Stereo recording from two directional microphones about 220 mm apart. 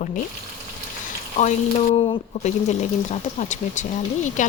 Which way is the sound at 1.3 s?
30° left (ahead or behind).